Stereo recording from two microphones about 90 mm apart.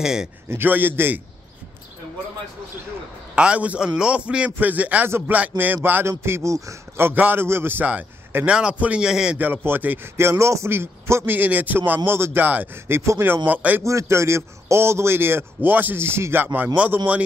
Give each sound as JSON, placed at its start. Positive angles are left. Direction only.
{"t": 0.0, "sound": "a man's voice", "side_deg": -5}
{"t": 0.5, "sound": "a man's voice", "side_deg": -20}
{"t": 3.3, "sound": "a man's voice", "side_deg": -15}
{"t": 9.4, "sound": "a man's voice", "side_deg": -20}
{"t": 13.8, "sound": "a man's voice", "side_deg": -35}